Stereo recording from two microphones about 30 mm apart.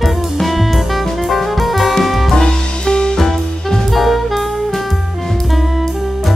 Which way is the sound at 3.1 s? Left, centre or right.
Centre.